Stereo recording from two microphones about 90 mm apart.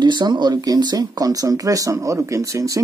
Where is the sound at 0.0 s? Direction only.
55° right (ahead or behind).